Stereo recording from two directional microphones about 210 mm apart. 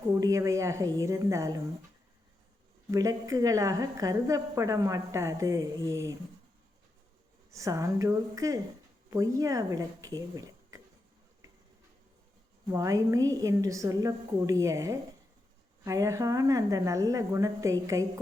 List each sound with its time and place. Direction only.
0.2 s a woman's voice: 15° right (ahead or behind)
2.9 s a woman's voice: 15° right (ahead or behind)
7.5 s a woman's voice: 15° right (ahead or behind)
12.7 s a woman's voice: 15° right (ahead or behind)